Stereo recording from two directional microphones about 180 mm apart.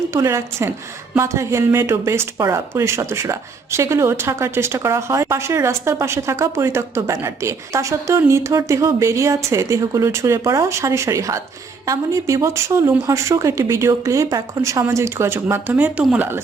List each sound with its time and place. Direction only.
0.1 s speech: 15° right (ahead or behind)